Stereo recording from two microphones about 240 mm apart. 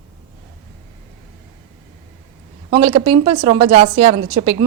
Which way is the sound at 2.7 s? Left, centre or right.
Right.